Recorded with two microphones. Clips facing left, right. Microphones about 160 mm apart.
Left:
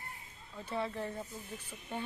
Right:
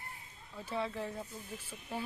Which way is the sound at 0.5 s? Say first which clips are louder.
Even; centre (ahead or behind).